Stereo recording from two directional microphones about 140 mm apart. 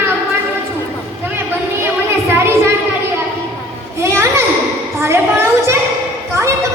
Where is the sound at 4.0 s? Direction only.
20° right (ahead or behind).